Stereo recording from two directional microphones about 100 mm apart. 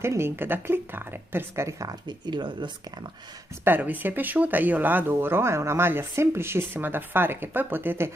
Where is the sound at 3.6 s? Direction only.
20° right (ahead or behind).